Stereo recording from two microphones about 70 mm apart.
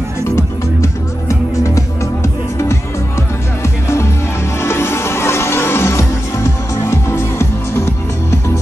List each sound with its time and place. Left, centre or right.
1.6 s music: left
4.6 s music: left